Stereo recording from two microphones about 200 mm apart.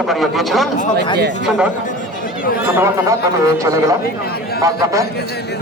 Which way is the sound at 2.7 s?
15° right (ahead or behind).